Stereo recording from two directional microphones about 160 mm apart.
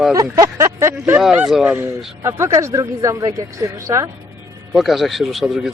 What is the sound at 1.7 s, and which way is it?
Speech, 15° right (ahead or behind).